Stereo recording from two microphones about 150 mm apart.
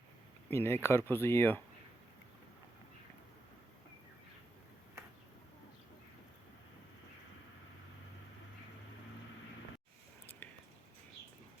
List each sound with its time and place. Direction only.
0.5 s speech: 15° left (ahead or behind)